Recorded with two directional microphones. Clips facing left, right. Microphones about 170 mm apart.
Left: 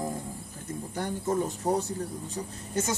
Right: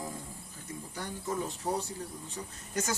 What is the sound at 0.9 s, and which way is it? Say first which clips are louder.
Speech: left 7 dB; 50° left (ahead or behind).